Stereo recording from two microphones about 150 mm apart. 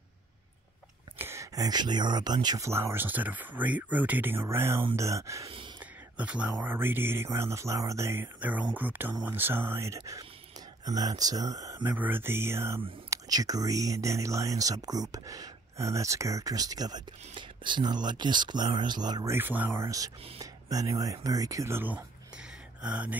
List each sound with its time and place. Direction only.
1.1 s speech: 15° right (ahead or behind)
5.8 s a sound: 10° right (ahead or behind)
6.6 s speech: 15° right (ahead or behind)
11.8 s speech: 10° right (ahead or behind); by 19.3 s 25° right (ahead or behind)
19.3 s speech: 10° right (ahead or behind)